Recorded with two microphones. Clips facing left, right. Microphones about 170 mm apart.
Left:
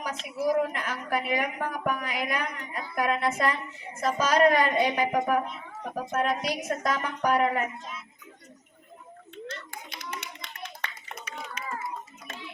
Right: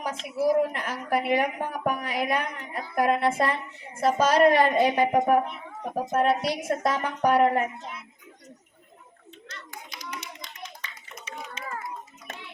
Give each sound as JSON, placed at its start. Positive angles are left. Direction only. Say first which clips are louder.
{"t": 0.0, "sound": "a woman's voice", "louder": "right 3 dB", "side_deg": -30}
{"t": 7.8, "sound": "speech", "louder": "right 2 dB", "side_deg": -65}
{"t": 10.2, "sound": "clapping", "louder": "even", "side_deg": 60}
{"t": 11.6, "sound": "a sound", "louder": "left 1 dB", "side_deg": -25}